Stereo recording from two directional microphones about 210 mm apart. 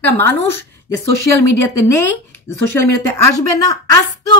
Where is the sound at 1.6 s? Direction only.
15° left (ahead or behind).